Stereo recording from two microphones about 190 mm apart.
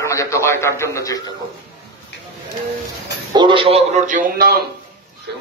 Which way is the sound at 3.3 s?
25° right (ahead or behind).